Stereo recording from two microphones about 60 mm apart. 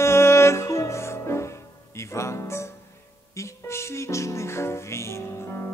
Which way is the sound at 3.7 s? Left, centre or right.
Left.